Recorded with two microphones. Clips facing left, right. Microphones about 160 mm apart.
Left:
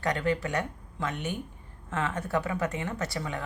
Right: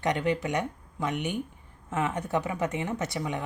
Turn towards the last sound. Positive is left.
turn(degrees=-20)  # may be behind; listen again after turning